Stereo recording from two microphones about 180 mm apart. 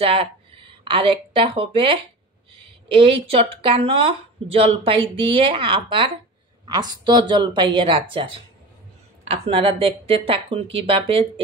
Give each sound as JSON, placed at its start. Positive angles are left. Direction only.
{"t": 0.0, "sound": "speech", "side_deg": -30}